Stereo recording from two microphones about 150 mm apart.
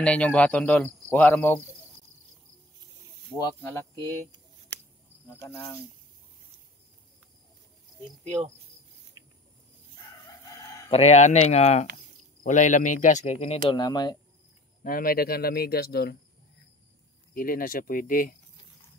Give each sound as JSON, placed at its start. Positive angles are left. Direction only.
{"t": 0.0, "sound": "speech", "side_deg": 5}
{"t": 3.6, "sound": "speech", "side_deg": 15}
{"t": 5.3, "sound": "speech", "side_deg": 15}
{"t": 10.9, "sound": "speech", "side_deg": 45}
{"t": 13.7, "sound": "speech", "side_deg": 30}
{"t": 14.8, "sound": "speech", "side_deg": 70}
{"t": 17.3, "sound": "speech", "side_deg": 70}